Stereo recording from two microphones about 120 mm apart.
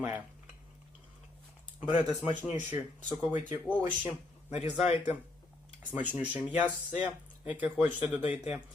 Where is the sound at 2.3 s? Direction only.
90° left.